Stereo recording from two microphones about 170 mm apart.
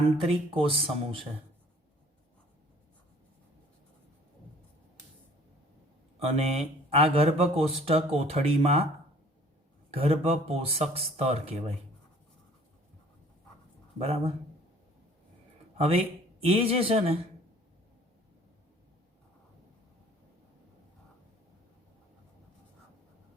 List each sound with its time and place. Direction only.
0.2 s speech: 35° right (ahead or behind)
6.2 s speech: 35° right (ahead or behind)
9.9 s speech: 35° right (ahead or behind)
14.0 s speech: 35° right (ahead or behind)
16.4 s speech: 35° right (ahead or behind)